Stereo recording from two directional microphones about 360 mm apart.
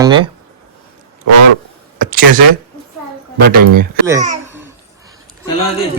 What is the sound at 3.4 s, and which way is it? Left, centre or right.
Speech, right.